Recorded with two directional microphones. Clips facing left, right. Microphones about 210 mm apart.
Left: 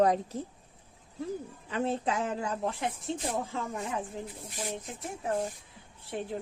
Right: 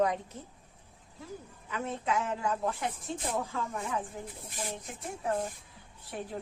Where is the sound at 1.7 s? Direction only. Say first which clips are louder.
Left 3 dB; 30° left (ahead or behind).